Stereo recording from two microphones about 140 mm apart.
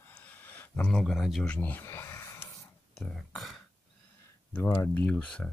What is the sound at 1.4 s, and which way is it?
Speech, 10° left (ahead or behind).